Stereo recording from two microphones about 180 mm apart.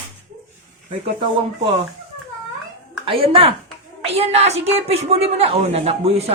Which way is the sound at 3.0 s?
30° right (ahead or behind).